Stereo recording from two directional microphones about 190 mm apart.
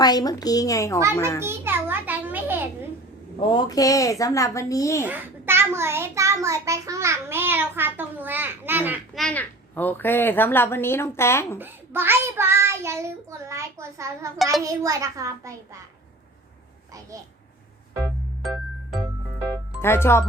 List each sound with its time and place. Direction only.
0.0 s a woman's voice: 20° left (ahead or behind)
1.4 s a child's voice: 10° right (ahead or behind)
3.5 s a child's voice: 20° left (ahead or behind)
5.0 s a child's voice: 10° right (ahead or behind)
9.1 s a child's voice: 5° left (ahead or behind)
11.5 s a child's voice: 10° right (ahead or behind)
19.8 s a child's voice: 15° left (ahead or behind)